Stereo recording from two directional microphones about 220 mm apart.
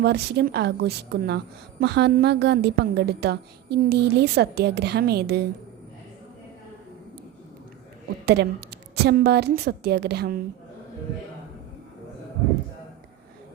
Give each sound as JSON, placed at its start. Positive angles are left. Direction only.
{"t": 0.0, "sound": "a woman's voice", "side_deg": -50}
{"t": 8.2, "sound": "a woman's voice", "side_deg": -50}